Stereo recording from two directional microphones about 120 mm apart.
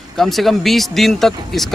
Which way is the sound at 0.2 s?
Centre (ahead or behind).